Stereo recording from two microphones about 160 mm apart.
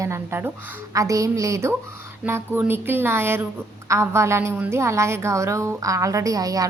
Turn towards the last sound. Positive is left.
turn(degrees=-20)  # may be behind; listen again after turning